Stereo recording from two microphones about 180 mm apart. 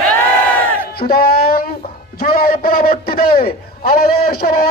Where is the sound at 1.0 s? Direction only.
55° left (ahead or behind).